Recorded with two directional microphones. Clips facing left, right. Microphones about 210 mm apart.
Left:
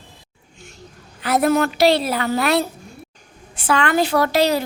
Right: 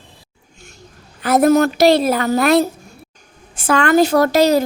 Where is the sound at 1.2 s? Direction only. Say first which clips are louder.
Right 5 dB; 45° right (ahead or behind).